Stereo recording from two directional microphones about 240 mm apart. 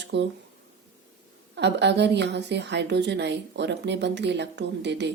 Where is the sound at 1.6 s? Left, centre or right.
Right.